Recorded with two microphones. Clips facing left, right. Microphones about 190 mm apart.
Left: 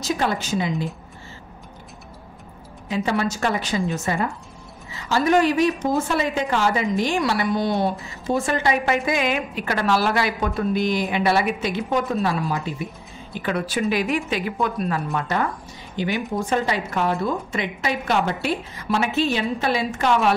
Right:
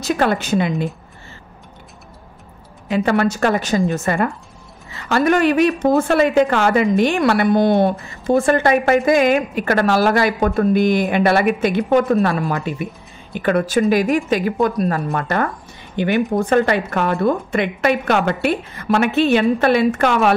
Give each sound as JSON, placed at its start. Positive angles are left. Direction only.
{"t": 0.0, "sound": "a woman's voice", "side_deg": -60}
{"t": 2.9, "sound": "a woman's voice", "side_deg": -60}
{"t": 15.2, "sound": "a woman's voice", "side_deg": -55}